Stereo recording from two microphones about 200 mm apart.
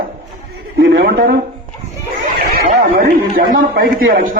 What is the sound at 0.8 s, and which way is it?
Speech, 50° right (ahead or behind).